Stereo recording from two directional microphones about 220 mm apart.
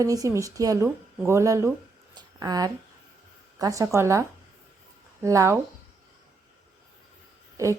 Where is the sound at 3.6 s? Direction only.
15° right (ahead or behind).